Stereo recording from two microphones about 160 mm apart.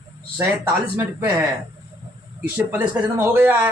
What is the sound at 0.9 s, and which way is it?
Speech, 10° right (ahead or behind).